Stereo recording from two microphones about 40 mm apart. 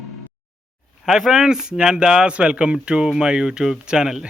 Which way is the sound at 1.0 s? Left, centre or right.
Centre.